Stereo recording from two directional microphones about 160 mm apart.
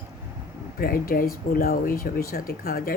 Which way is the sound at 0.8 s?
65° left (ahead or behind).